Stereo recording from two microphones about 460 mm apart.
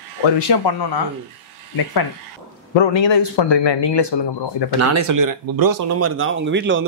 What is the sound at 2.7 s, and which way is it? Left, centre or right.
A man's voice, left.